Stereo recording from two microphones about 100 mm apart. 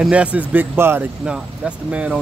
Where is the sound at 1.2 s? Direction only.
10° right (ahead or behind).